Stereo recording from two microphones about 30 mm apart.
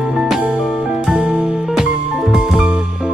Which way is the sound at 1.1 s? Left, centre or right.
Right.